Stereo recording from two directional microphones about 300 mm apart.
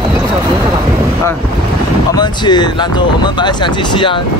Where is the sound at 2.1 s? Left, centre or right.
Centre.